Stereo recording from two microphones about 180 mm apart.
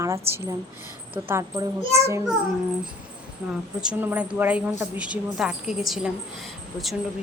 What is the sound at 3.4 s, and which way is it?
Speech, 5° right (ahead or behind).